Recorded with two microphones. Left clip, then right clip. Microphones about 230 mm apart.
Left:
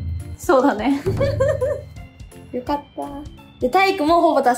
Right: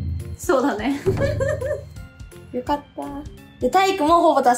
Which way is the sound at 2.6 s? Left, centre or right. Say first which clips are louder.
Even; centre.